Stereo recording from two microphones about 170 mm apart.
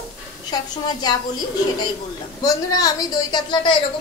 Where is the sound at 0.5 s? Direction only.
25° left (ahead or behind).